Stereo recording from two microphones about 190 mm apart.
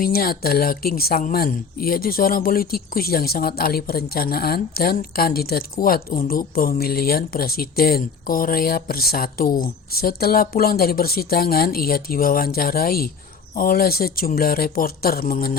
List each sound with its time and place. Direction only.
0.0 s speech: 50° left (ahead or behind)